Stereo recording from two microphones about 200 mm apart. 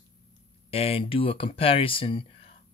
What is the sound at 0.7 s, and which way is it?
Speech, 30° left (ahead or behind).